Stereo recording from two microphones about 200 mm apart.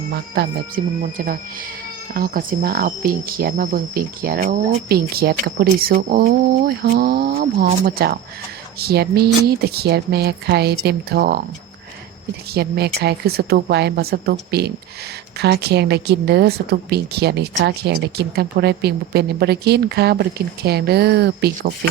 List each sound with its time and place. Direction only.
1.0 s speech: 45° right (ahead or behind)
12.5 s speech: 55° right (ahead or behind)